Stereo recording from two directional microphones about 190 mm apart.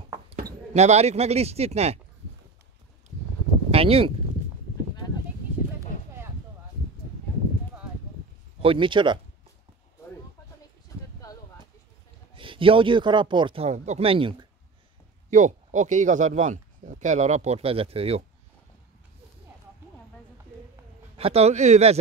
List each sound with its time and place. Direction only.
0.3 s a sound: 55° right (ahead or behind)
0.7 s speech: 35° right (ahead or behind)
3.7 s speech: 30° right (ahead or behind)
8.5 s speech: 25° right (ahead or behind)
12.4 s speech: 25° right (ahead or behind)
15.2 s speech: 40° right (ahead or behind)
21.2 s speech: 35° right (ahead or behind)